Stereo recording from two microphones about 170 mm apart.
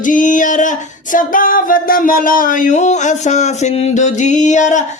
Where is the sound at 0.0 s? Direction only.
50° left (ahead or behind).